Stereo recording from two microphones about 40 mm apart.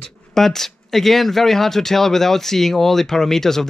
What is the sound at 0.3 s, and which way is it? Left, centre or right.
Speech, centre.